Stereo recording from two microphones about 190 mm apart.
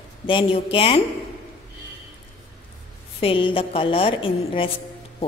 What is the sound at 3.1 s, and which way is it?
A woman's voice, 30° left (ahead or behind).